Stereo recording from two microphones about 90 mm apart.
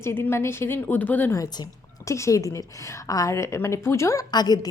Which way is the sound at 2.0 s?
35° left (ahead or behind).